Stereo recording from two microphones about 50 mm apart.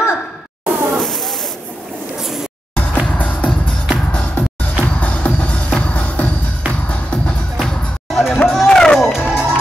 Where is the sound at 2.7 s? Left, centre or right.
Left.